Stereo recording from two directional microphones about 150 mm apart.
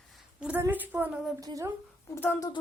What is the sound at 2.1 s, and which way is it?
Speech, 10° left (ahead or behind).